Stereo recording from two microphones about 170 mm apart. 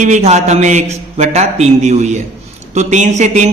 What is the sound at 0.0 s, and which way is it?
A man's voice, 45° right (ahead or behind).